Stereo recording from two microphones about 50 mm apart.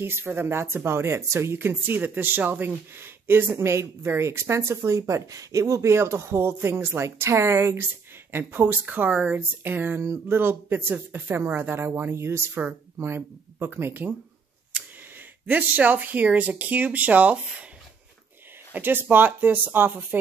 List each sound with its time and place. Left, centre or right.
0.0 s speech: right
3.5 s speech: right
8.3 s speech: right
12.5 s speech: right
15.4 s speech: right
18.7 s speech: right